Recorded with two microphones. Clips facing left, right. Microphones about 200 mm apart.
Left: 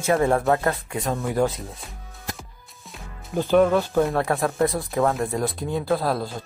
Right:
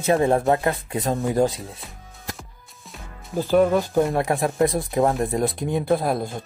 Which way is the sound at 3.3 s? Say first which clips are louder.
Even; 10° right (ahead or behind).